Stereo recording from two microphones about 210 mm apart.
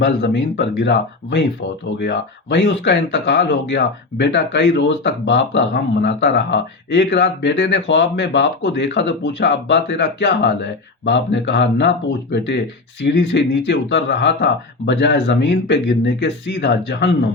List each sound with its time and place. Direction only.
0.0 s speech: 55° left (ahead or behind)